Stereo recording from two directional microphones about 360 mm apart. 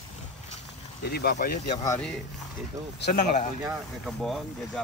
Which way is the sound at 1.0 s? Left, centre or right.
Left.